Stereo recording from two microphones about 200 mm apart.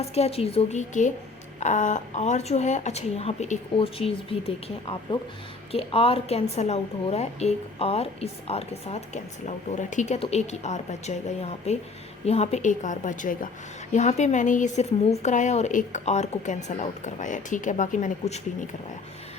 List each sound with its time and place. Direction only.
0.0 s a woman's voice: 30° left (ahead or behind)